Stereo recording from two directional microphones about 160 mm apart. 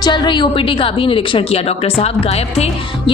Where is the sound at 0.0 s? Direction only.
30° left (ahead or behind).